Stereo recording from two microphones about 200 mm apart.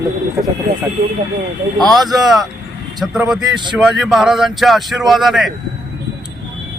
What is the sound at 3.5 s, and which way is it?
Speech, 20° right (ahead or behind).